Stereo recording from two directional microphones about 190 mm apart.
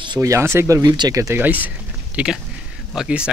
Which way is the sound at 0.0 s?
20° right (ahead or behind).